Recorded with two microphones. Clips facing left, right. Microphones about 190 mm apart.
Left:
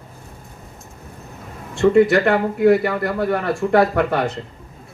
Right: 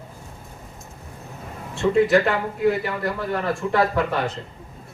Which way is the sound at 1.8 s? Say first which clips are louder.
Left 4 dB; 70° left (ahead or behind).